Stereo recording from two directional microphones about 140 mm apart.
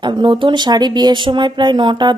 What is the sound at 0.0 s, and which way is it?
Speech, 35° right (ahead or behind).